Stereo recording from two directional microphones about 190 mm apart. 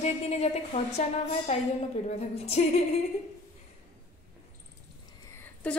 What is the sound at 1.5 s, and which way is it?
A woman's voice, 35° left (ahead or behind).